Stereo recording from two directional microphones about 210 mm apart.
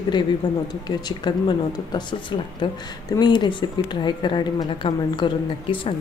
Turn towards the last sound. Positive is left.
turn(degrees=25)  # may be behind; listen again after turning